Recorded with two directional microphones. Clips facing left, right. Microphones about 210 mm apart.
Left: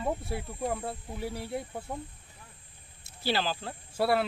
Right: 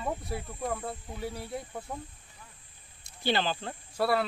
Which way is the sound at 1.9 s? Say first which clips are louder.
Left 2 dB; 20° left (ahead or behind).